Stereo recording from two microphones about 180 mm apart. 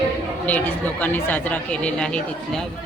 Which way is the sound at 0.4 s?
10° left (ahead or behind).